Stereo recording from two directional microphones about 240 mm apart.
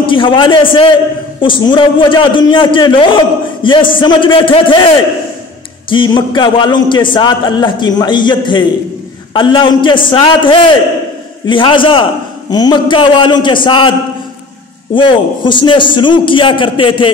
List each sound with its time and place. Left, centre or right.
0.0 s a man's voice: left
15.0 s a man's voice: centre